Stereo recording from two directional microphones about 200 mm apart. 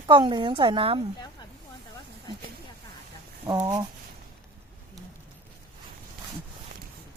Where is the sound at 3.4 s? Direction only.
20° right (ahead or behind).